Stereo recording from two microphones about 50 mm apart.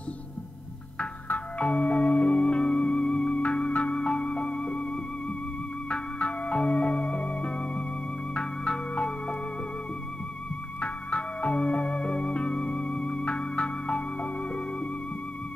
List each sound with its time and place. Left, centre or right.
1.3 s music: left
5.9 s music: left
7.2 s theremin: left
8.4 s music: centre
10.8 s music: left